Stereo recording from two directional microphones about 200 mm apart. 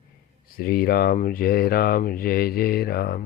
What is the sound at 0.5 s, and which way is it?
Speech, 50° left (ahead or behind).